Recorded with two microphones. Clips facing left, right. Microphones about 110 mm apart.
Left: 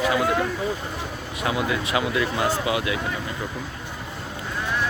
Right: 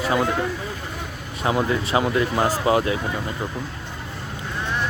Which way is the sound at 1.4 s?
35° right (ahead or behind).